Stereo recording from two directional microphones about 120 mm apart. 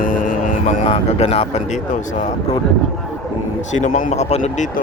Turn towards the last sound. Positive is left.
turn(degrees=80)